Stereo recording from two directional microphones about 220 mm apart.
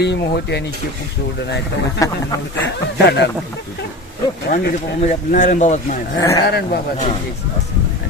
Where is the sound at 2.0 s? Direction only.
15° left (ahead or behind).